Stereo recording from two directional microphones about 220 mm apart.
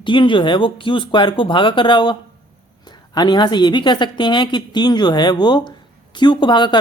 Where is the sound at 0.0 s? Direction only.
20° left (ahead or behind).